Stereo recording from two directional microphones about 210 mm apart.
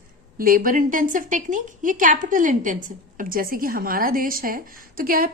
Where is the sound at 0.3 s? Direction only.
40° right (ahead or behind).